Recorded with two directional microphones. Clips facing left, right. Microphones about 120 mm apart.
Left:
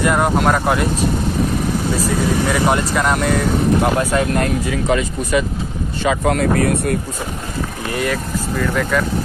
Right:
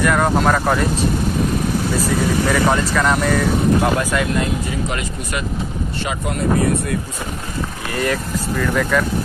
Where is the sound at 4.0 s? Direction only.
30° left (ahead or behind).